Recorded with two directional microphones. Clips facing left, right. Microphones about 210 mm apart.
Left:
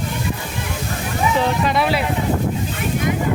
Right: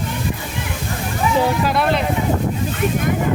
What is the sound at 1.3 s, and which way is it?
Speech, 5° right (ahead or behind).